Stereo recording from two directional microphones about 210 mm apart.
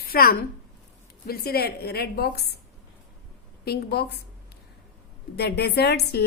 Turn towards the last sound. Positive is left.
turn(degrees=50)  # may be behind; listen again after turning